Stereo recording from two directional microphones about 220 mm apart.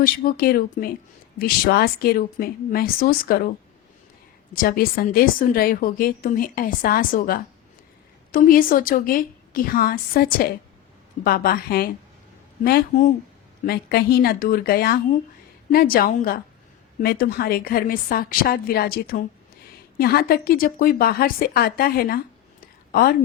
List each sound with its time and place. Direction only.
0.0 s a woman's voice: 40° left (ahead or behind)
4.5 s a woman's voice: 40° left (ahead or behind)
22.6 s a sound: 40° left (ahead or behind)